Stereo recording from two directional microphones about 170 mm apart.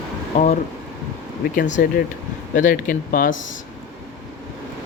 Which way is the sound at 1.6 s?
45° left (ahead or behind).